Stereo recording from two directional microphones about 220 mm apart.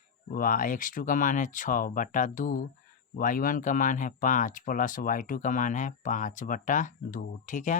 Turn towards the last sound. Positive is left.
turn(degrees=35)  # may be behind; listen again after turning